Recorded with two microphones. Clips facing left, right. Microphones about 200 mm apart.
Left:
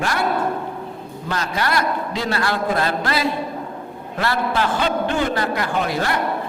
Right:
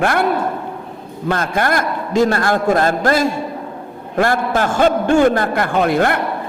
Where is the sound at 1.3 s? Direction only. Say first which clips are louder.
Right 5 dB; 50° right (ahead or behind).